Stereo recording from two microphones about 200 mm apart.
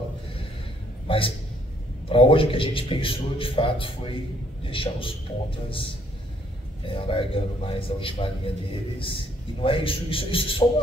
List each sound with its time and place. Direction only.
1.0 s a man's voice: 25° left (ahead or behind)
7.0 s a man's voice: 25° left (ahead or behind)